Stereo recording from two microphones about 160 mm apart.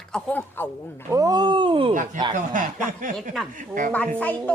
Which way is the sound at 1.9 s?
50° right (ahead or behind).